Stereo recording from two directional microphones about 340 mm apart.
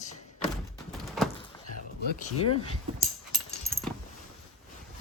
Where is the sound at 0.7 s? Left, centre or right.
Centre.